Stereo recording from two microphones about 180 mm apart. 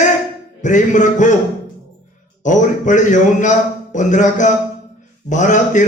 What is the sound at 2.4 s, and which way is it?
A man's voice, 45° left (ahead or behind).